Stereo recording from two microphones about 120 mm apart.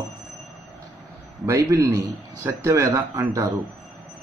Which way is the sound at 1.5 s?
25° right (ahead or behind).